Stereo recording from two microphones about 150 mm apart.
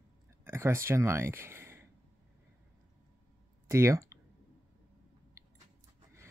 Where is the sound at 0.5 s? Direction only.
20° right (ahead or behind).